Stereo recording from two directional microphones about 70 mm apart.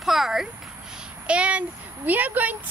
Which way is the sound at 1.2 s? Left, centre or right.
Centre.